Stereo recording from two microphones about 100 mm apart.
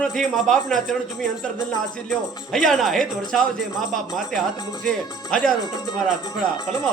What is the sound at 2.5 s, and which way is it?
A man's voice, 5° left (ahead or behind).